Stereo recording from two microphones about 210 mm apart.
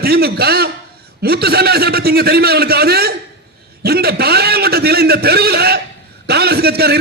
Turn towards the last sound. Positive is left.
turn(degrees=-50)  # may be behind; listen again after turning